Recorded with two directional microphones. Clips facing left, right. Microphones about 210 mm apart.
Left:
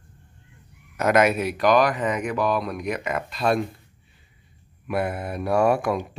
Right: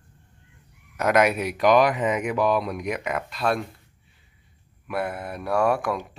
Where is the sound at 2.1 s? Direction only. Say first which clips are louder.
Right 1 dB; 10° right (ahead or behind).